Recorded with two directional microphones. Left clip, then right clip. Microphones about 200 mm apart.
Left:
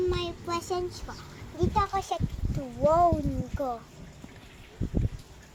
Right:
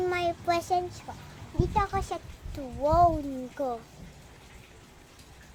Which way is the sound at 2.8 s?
15° right (ahead or behind).